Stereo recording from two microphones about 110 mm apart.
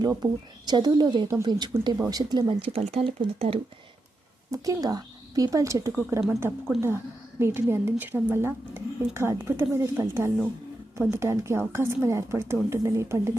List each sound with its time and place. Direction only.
0.0 s a woman's voice: 40° right (ahead or behind)
2.6 s speech: 60° right (ahead or behind)
3.3 s speech: 60° right (ahead or behind)
4.5 s a woman's voice: 30° right (ahead or behind)
6.2 s a woman's voice: 20° right (ahead or behind)